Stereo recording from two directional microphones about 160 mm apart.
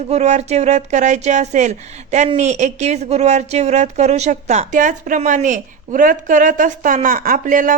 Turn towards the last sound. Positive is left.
turn(degrees=-55)  # may be behind; listen again after turning